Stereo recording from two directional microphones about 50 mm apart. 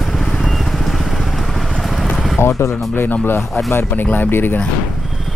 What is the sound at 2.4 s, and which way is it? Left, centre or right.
Artillery fire, left.